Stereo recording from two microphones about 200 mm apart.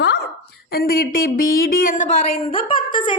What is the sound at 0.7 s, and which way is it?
A woman's voice, 50° left (ahead or behind).